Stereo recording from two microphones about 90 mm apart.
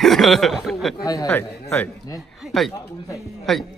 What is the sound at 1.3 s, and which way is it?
Speech, 25° left (ahead or behind).